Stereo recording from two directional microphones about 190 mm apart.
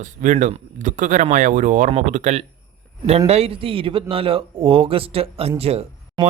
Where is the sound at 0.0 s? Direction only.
40° right (ahead or behind).